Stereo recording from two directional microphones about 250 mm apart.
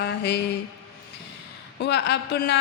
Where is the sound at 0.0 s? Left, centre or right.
Left.